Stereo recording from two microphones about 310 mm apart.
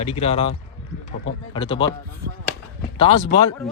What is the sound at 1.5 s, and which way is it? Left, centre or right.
Speech, centre.